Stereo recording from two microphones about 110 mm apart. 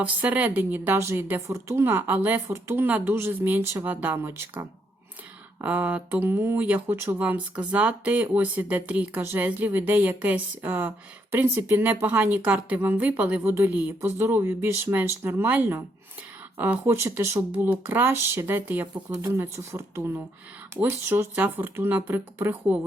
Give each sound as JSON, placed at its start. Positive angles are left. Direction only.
{"t": 0.0, "sound": "speech", "side_deg": -15}
{"t": 5.6, "sound": "speech", "side_deg": -15}